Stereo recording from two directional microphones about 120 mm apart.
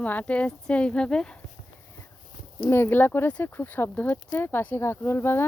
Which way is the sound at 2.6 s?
20° left (ahead or behind).